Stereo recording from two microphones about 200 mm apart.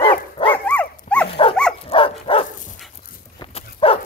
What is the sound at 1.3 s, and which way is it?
Dog, 25° left (ahead or behind).